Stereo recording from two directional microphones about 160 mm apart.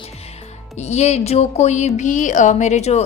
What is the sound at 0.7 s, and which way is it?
Speech, 45° left (ahead or behind).